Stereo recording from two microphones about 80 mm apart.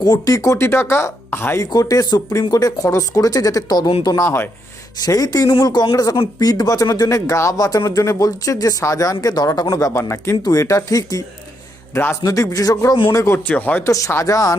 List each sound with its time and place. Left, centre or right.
0.0 s speech: left
0.3 s speech: left
1.7 s speech: left
4.2 s speech: left
5.0 s speech: left
9.2 s speech: left
12.2 s speech: left
13.5 s speech: left
13.8 s speech: left